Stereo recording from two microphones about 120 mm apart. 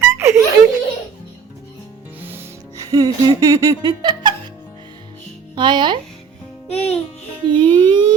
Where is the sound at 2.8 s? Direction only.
30° right (ahead or behind).